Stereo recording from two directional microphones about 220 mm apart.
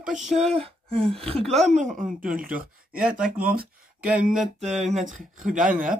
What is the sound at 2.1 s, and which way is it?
Speech, 40° right (ahead or behind).